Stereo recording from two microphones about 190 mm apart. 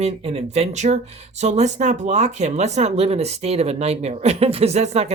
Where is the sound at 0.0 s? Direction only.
35° right (ahead or behind).